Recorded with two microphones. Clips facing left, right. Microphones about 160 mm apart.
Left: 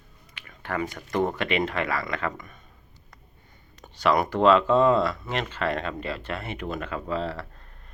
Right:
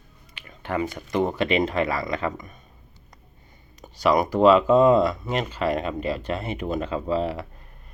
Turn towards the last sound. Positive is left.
turn(degrees=-15)  # may be behind; listen again after turning